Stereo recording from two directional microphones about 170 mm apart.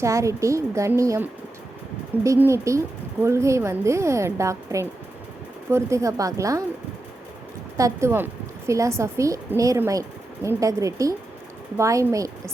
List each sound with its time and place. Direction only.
0.0 s speech: 15° right (ahead or behind)
7.8 s speech: 15° right (ahead or behind)